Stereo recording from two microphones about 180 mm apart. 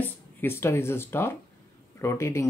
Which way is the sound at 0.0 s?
10° left (ahead or behind).